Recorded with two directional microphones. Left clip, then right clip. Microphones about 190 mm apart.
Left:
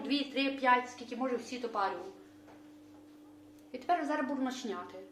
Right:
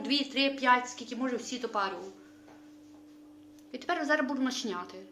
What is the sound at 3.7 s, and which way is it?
A woman's voice, 45° right (ahead or behind).